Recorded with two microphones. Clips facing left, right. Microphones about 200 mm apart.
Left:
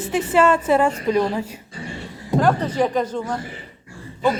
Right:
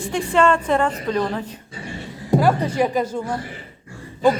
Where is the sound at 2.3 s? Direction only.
10° right (ahead or behind).